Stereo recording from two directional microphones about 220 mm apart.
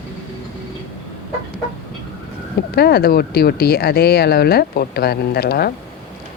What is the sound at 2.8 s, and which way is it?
Speech, 45° left (ahead or behind).